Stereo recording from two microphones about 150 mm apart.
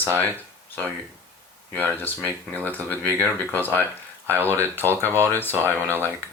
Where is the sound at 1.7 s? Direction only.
15° left (ahead or behind).